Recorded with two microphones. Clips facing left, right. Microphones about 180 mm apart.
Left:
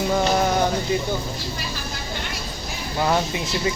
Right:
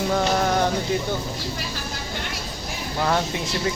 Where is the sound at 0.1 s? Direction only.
10° left (ahead or behind).